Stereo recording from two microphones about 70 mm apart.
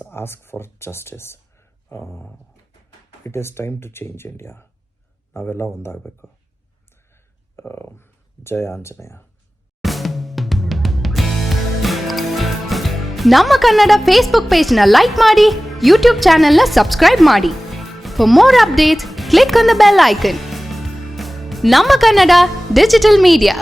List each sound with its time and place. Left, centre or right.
0.0 s speech: left
3.2 s speech: left
7.5 s speech: left
9.8 s music: centre